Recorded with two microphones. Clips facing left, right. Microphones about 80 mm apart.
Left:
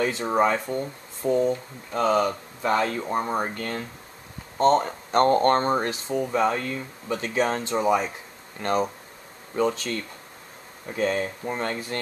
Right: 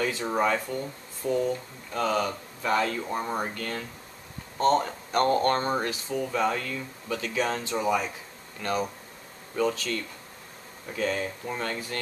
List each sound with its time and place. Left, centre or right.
0.0 s speech: left